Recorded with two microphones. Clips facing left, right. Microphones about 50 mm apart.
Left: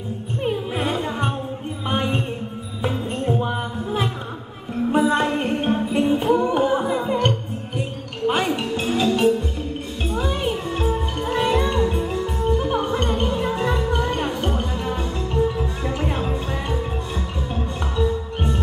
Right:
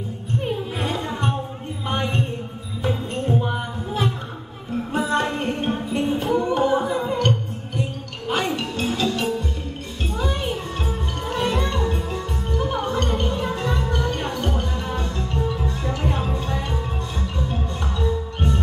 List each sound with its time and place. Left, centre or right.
0.4 s music: centre
4.9 s music: centre
6.3 s a capella: centre
7.1 s music: centre
10.8 s music: centre